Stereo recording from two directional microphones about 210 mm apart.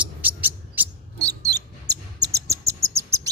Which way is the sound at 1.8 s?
55° right (ahead or behind).